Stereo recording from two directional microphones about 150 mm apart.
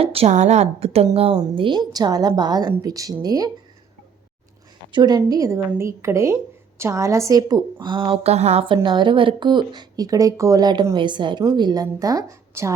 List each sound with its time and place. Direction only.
0.0 s a woman's voice: 40° right (ahead or behind); by 3.5 s 25° right (ahead or behind)
4.9 s speech: 30° right (ahead or behind); by 8.6 s 45° right (ahead or behind)
8.6 s speech: 35° right (ahead or behind)